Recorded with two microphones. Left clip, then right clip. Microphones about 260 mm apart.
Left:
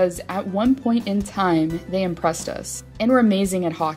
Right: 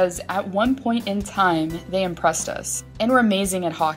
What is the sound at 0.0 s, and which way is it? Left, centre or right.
Speech, left.